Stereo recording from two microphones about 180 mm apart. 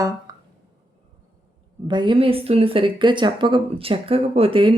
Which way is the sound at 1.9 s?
25° right (ahead or behind).